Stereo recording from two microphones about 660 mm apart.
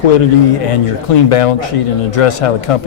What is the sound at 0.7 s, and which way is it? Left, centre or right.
Speech, left.